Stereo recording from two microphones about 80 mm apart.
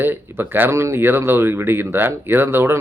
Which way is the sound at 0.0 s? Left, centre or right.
Right.